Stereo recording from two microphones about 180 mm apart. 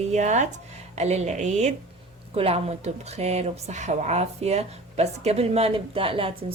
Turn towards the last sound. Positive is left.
turn(degrees=-30)  # may be behind; listen again after turning